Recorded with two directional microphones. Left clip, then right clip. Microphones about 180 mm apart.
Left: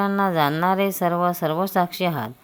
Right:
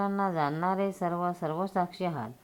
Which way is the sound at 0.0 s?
35° left (ahead or behind).